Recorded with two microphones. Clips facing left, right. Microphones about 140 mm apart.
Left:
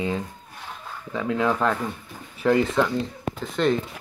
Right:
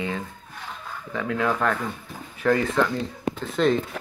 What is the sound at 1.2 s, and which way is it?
Speech, 25° left (ahead or behind).